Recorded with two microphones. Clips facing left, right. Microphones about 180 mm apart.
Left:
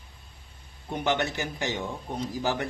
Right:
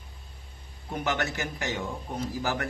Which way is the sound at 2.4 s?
25° left (ahead or behind).